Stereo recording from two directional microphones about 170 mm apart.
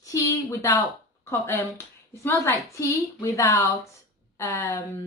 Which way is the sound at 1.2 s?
15° left (ahead or behind).